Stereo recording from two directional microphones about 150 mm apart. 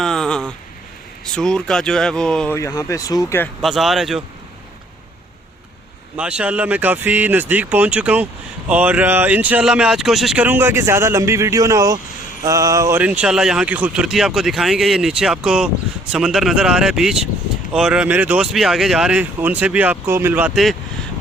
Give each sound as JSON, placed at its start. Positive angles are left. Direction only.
{"t": 0.0, "sound": "a sound", "side_deg": 5}
{"t": 1.2, "sound": "speech", "side_deg": 5}
{"t": 2.6, "sound": "speech", "side_deg": 20}
{"t": 3.6, "sound": "speech", "side_deg": 0}
{"t": 6.1, "sound": "speech", "side_deg": -5}
{"t": 13.0, "sound": "speech", "side_deg": -10}